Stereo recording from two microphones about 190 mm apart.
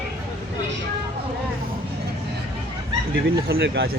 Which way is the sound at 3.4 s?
60° right (ahead or behind).